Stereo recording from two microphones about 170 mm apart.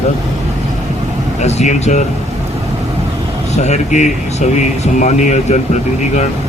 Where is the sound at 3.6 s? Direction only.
45° left (ahead or behind).